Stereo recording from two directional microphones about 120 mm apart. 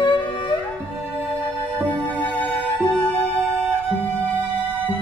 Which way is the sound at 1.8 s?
10° left (ahead or behind).